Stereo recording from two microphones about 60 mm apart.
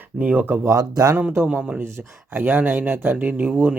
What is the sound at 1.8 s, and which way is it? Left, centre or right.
Speech, right.